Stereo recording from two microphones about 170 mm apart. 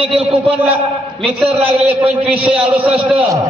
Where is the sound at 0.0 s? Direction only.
10° right (ahead or behind).